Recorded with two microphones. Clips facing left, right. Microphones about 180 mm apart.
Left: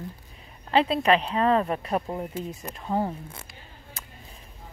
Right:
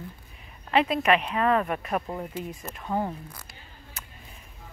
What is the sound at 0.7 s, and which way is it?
Speech, 30° left (ahead or behind).